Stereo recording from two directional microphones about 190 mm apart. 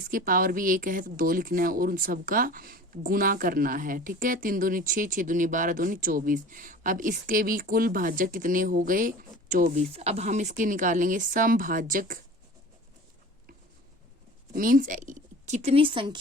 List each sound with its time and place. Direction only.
0.1 s speech: 45° right (ahead or behind)
9.9 s speech: 35° right (ahead or behind)
14.5 s a woman's voice: 45° right (ahead or behind); by 16.1 s 25° right (ahead or behind)